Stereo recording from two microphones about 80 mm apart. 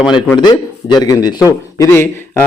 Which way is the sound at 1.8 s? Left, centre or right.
Left.